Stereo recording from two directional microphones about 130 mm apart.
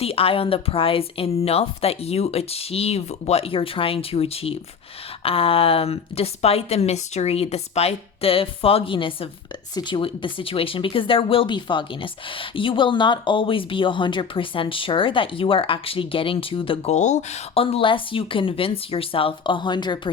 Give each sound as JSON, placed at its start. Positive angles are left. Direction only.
{"t": 0.0, "sound": "speech", "side_deg": 45}
{"t": 16.9, "sound": "speech", "side_deg": 65}